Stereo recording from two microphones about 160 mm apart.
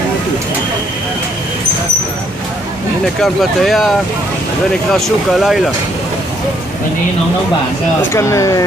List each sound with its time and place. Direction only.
3.2 s speech: centre (ahead or behind)
4.9 s speech: centre (ahead or behind)
8.1 s speech: 20° left (ahead or behind)